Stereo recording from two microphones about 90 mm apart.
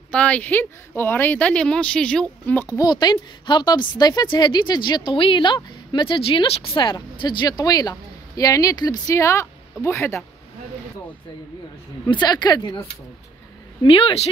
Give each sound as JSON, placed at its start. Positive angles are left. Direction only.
{"t": 0.1, "sound": "speech", "side_deg": 15}
{"t": 2.8, "sound": "a woman's voice", "side_deg": 50}
{"t": 9.1, "sound": "speech", "side_deg": 35}
{"t": 12.1, "sound": "a woman's voice", "side_deg": 55}
{"t": 13.8, "sound": "speech", "side_deg": 90}